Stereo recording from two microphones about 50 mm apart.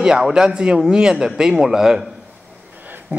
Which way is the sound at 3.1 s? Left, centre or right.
Right.